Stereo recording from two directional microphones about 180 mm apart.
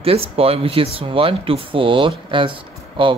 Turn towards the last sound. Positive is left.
turn(degrees=-30)  # may be behind; listen again after turning